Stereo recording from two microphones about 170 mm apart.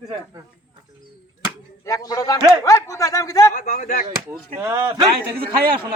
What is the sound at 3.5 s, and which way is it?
Speech, 50° left (ahead or behind).